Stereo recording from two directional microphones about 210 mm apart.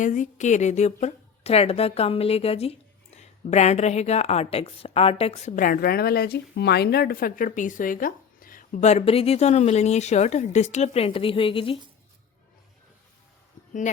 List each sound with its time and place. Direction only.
0.0 s a woman's voice: 35° left (ahead or behind)